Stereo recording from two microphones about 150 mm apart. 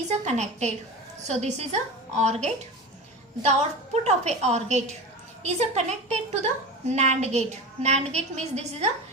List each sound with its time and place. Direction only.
0.1 s a woman's voice: 50° right (ahead or behind)